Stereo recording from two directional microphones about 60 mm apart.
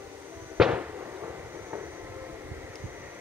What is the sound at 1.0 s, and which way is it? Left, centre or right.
Vehicle, right.